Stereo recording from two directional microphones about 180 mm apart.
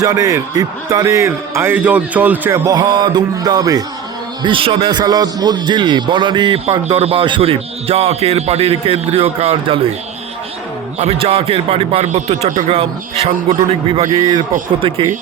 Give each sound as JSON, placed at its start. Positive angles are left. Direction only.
{"t": 0.0, "sound": "a man's voice", "side_deg": -20}
{"t": 2.6, "sound": "a man's voice", "side_deg": -25}
{"t": 10.9, "sound": "speech", "side_deg": -35}
{"t": 13.9, "sound": "a man's voice", "side_deg": -30}